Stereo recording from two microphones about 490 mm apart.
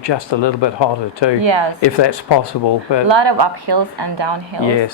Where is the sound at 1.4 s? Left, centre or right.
Right.